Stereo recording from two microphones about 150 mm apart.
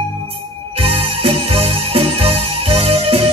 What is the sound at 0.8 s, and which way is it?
Music, 40° right (ahead or behind).